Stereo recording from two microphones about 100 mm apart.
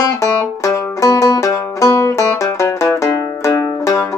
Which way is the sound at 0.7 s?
35° left (ahead or behind).